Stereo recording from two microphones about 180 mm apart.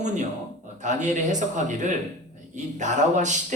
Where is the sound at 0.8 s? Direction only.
40° right (ahead or behind).